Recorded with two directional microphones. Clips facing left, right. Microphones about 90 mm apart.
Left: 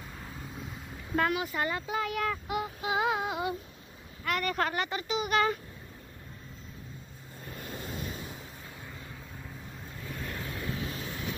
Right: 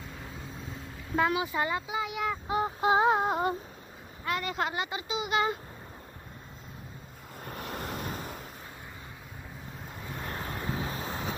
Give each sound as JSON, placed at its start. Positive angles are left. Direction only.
{"t": 1.1, "sound": "speech", "side_deg": -20}
{"t": 2.4, "sound": "synthetic singing", "side_deg": -30}
{"t": 4.2, "sound": "speech", "side_deg": -20}
{"t": 7.4, "sound": "vehicle", "side_deg": -60}
{"t": 8.0, "sound": "a sound", "side_deg": -50}
{"t": 10.2, "sound": "vehicle", "side_deg": -35}